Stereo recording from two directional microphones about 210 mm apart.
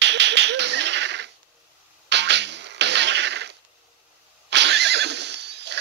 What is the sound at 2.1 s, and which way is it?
Music, 55° right (ahead or behind).